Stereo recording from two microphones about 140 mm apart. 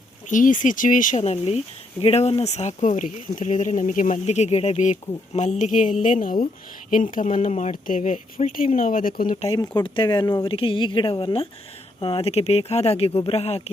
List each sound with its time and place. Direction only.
0.3 s speech: 65° left (ahead or behind)
1.2 s speech: 50° left (ahead or behind); by 9.3 s 85° left
9.5 s speech: 25° left (ahead or behind); by 13.6 s 45° left (ahead or behind)